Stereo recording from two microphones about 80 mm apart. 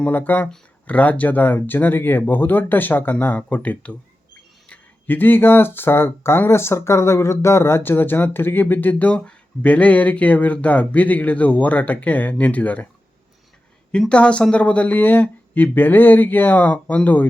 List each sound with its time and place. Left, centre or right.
0.0 s speech: left
13.9 s speech: centre